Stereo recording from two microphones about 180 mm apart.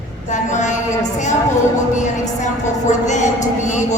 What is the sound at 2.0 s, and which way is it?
A woman's voice, 40° left (ahead or behind).